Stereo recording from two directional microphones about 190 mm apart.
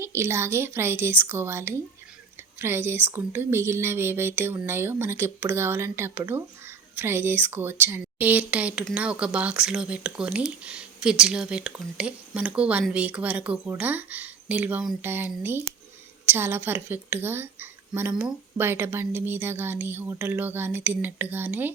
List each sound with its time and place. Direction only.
0.0 s a woman's voice: 15° right (ahead or behind)